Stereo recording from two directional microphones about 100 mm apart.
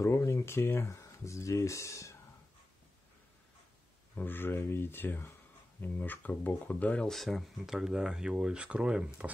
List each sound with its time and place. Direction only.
0.0 s speech: 30° left (ahead or behind)
4.1 s speech: 20° left (ahead or behind)
7.1 s speech: centre (ahead or behind)